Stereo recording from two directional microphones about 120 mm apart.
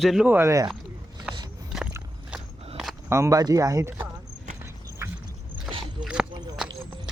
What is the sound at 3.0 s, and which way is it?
Speech, 20° right (ahead or behind).